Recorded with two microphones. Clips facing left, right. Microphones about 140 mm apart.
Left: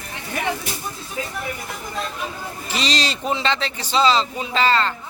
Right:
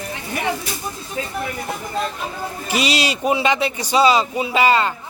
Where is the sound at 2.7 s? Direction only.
10° right (ahead or behind).